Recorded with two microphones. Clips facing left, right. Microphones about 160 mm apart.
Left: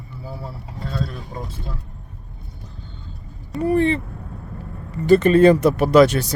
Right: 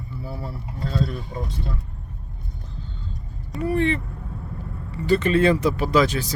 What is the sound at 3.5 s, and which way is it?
Speech, 40° left (ahead or behind).